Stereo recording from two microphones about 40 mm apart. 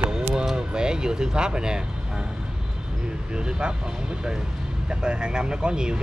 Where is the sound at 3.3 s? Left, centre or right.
Right.